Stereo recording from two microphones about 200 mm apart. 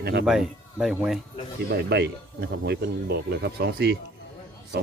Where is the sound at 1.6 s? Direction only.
55° right (ahead or behind).